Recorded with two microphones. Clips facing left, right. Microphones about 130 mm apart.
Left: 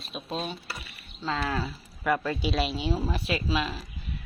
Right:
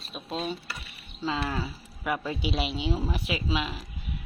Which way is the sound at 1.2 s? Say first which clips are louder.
Even; 10° right (ahead or behind).